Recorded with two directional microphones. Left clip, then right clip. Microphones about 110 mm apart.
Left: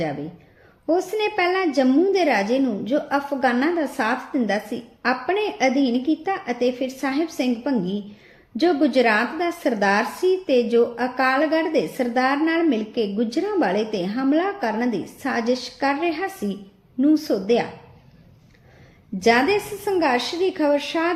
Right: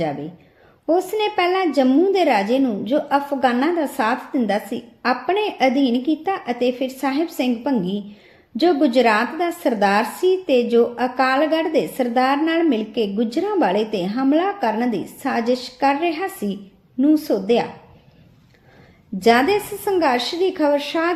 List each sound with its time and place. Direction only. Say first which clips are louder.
0.9 s speech: right 2 dB; 35° right (ahead or behind)
19.2 s speech: right 2 dB; 35° right (ahead or behind)